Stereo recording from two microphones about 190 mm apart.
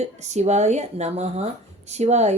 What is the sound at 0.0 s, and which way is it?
A woman's voice, 35° right (ahead or behind).